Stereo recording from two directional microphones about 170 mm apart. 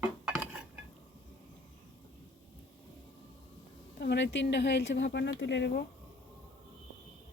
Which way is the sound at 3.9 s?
80° left.